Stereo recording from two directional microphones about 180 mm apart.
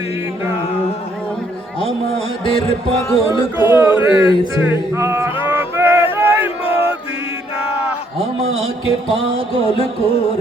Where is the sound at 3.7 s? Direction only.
15° right (ahead or behind).